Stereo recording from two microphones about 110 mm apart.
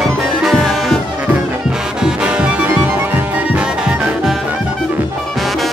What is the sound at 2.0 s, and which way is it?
Music, 10° right (ahead or behind).